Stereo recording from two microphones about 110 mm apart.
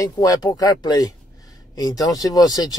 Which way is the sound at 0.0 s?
35° left (ahead or behind).